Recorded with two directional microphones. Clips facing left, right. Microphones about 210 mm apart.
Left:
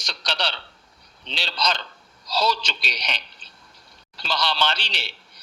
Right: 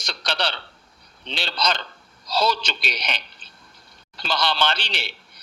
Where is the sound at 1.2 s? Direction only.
55° right (ahead or behind).